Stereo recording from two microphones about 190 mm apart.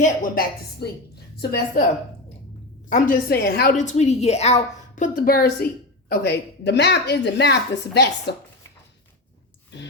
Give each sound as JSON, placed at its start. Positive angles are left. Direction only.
{"t": 0.0, "sound": "a woman's voice", "side_deg": 45}
{"t": 0.8, "sound": "a woman's voice", "side_deg": 60}
{"t": 2.9, "sound": "a woman's voice", "side_deg": 50}
{"t": 9.7, "sound": "a sound", "side_deg": 65}